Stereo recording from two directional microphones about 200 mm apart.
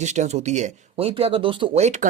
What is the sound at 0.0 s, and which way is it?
Speech, 35° right (ahead or behind).